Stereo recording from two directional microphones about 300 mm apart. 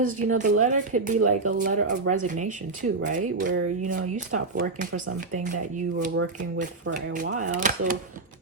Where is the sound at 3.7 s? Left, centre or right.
Right.